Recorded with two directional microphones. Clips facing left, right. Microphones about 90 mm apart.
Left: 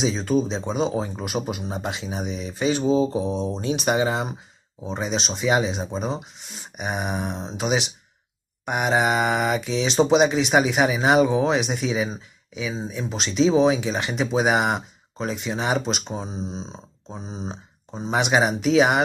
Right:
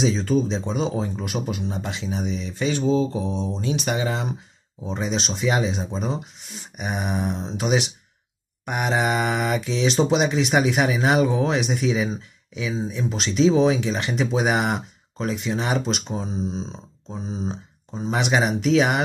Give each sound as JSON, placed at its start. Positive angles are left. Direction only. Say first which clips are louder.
{"t": 0.2, "sound": "speech", "louder": "even", "side_deg": 5}
{"t": 4.9, "sound": "speech", "louder": "even", "side_deg": 5}
{"t": 16.3, "sound": "speech", "louder": "right 4 dB", "side_deg": 30}
{"t": 18.0, "sound": "speech", "louder": "left 1 dB", "side_deg": 5}